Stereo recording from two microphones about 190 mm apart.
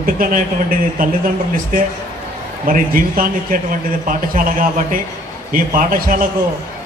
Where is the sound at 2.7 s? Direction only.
50° right (ahead or behind).